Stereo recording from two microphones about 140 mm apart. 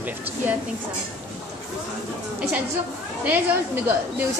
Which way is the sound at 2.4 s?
10° right (ahead or behind).